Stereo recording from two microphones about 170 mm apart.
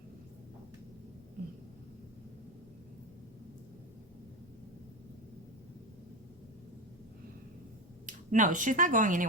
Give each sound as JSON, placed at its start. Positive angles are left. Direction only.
{"t": 8.0, "sound": "speech", "side_deg": -50}